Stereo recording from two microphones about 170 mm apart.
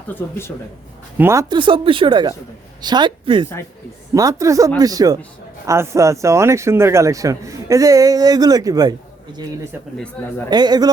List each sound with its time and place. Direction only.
0.1 s speech: 10° left (ahead or behind)
1.2 s a woman's voice: 15° right (ahead or behind)
1.5 s a man's voice: 30° right (ahead or behind)
10.5 s a man's voice: 25° right (ahead or behind)